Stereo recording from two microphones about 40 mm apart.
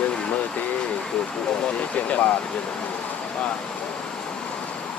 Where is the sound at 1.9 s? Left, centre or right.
Left.